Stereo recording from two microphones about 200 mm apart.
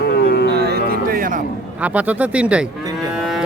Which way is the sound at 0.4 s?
55° right (ahead or behind).